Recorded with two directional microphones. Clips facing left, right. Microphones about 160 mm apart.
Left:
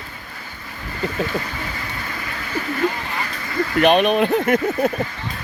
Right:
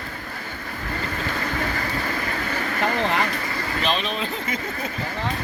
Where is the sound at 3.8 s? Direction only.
60° left (ahead or behind).